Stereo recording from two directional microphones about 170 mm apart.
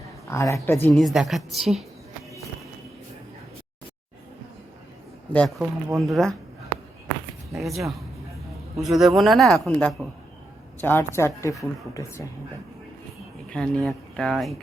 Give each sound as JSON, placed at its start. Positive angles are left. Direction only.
{"t": 0.3, "sound": "speech", "side_deg": 15}
{"t": 0.9, "sound": "a man's voice", "side_deg": 0}
{"t": 5.3, "sound": "a man's voice", "side_deg": 5}
{"t": 7.5, "sound": "a man's voice", "side_deg": 0}
{"t": 13.5, "sound": "a man's voice", "side_deg": 5}